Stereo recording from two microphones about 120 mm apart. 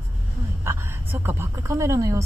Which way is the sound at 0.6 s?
20° right (ahead or behind).